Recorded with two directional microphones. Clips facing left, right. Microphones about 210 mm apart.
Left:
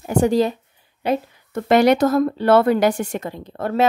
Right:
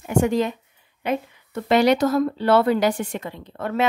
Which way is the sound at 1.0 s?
35° left (ahead or behind).